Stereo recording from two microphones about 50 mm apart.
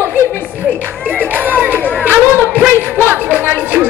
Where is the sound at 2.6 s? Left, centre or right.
Right.